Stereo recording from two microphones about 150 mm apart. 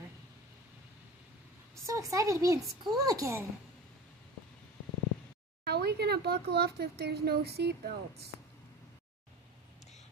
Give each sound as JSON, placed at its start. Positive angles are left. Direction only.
{"t": 1.9, "sound": "speech", "side_deg": -20}
{"t": 5.6, "sound": "speech", "side_deg": -90}